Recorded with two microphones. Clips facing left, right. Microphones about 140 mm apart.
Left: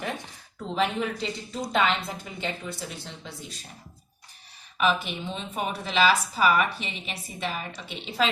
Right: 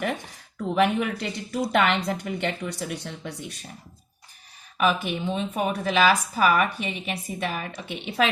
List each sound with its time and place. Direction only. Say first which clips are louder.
0.7 s speech: right 4 dB; 60° right (ahead or behind)
4.8 s a woman's voice: right 2 dB; 50° right (ahead or behind)